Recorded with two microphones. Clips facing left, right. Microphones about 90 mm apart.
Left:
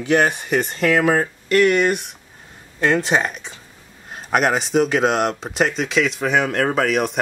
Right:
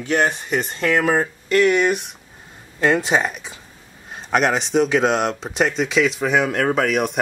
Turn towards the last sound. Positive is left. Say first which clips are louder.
# even
turn(degrees=0)  # may be behind; listen again after turning